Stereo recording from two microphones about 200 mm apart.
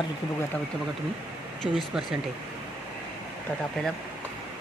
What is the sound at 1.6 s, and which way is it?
Speech, centre (ahead or behind).